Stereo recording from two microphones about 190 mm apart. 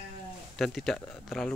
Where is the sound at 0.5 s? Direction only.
Centre (ahead or behind).